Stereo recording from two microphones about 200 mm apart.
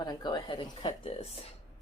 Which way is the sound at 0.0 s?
20° left (ahead or behind).